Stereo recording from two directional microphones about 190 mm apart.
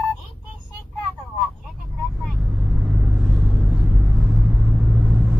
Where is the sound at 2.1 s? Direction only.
5° right (ahead or behind).